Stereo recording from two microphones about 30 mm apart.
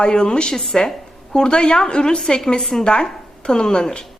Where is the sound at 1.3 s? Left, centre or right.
Left.